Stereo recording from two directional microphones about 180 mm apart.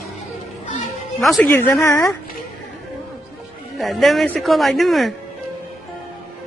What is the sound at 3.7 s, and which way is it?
Speech, centre (ahead or behind).